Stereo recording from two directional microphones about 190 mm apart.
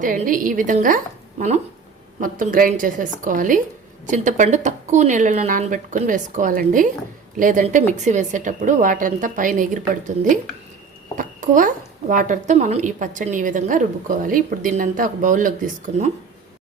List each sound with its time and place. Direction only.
0.0 s a woman's voice: 45° right (ahead or behind)
11.2 s a woman's voice: 45° right (ahead or behind)